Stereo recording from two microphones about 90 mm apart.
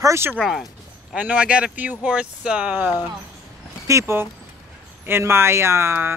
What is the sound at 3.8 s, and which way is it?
Speech, 30° right (ahead or behind).